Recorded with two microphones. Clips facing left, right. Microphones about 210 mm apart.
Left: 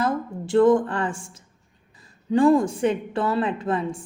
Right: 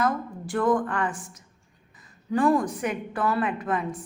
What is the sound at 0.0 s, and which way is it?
A woman's voice, 25° left (ahead or behind).